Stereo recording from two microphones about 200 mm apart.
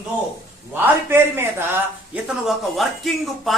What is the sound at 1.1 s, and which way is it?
Speech, 10° right (ahead or behind).